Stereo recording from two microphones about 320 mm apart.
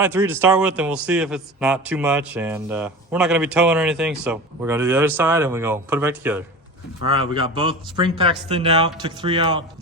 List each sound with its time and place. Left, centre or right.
0.0 s a man's voice: centre
7.1 s speech: centre